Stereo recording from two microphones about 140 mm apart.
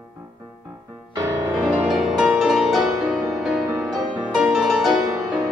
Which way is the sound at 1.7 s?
5° right (ahead or behind).